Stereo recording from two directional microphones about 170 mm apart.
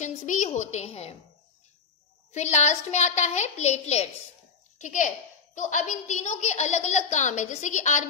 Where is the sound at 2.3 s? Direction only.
45° left (ahead or behind).